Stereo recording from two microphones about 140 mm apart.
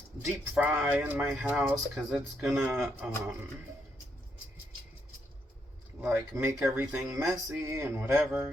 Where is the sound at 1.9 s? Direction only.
5° right (ahead or behind).